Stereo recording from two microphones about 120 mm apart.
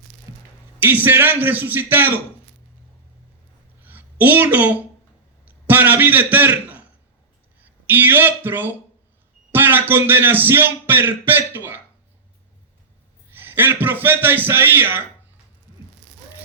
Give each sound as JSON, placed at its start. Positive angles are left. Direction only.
{"t": 0.8, "sound": "speech", "side_deg": -15}
{"t": 3.8, "sound": "a woman's voice", "side_deg": -15}
{"t": 13.6, "sound": "speech", "side_deg": -15}